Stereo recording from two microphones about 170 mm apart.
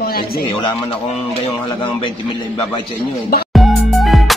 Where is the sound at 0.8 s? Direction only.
30° left (ahead or behind).